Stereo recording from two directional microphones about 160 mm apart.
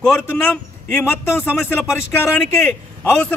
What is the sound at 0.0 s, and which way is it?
A man's voice, 5° left (ahead or behind).